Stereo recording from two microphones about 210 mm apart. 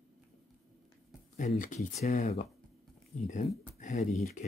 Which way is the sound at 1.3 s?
35° left (ahead or behind).